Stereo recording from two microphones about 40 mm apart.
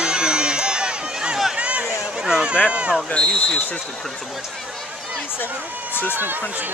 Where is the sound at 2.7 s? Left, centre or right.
Right.